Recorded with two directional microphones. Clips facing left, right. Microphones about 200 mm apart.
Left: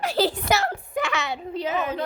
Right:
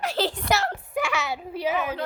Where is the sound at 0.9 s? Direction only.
10° right (ahead or behind).